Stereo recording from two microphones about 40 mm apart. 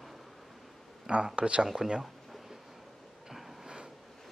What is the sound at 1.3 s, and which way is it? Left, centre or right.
Speech, right.